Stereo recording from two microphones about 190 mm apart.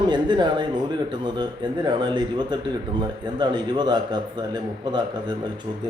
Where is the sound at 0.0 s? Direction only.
25° right (ahead or behind).